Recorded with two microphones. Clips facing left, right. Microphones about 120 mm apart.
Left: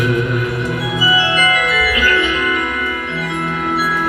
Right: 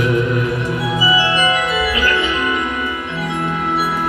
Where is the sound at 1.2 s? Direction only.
30° right (ahead or behind).